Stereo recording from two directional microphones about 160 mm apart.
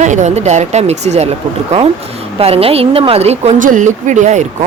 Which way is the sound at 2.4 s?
40° right (ahead or behind).